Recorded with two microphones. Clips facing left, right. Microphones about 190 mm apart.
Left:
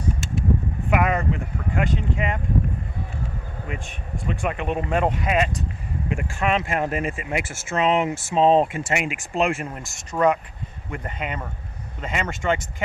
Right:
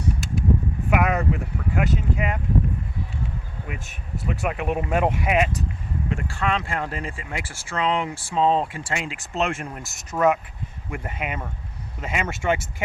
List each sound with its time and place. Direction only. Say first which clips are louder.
0.9 s speech: even; 5° right (ahead or behind)
3.7 s speech: left 2 dB; 5° right (ahead or behind)
6.1 s speech: left 2 dB; 15° left (ahead or behind); by 12.6 s 10° right (ahead or behind)